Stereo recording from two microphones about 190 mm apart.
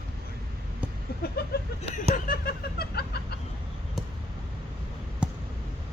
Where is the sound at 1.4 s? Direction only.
55° left (ahead or behind).